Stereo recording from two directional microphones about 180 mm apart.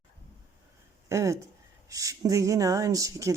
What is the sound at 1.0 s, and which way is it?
Speech, 15° right (ahead or behind).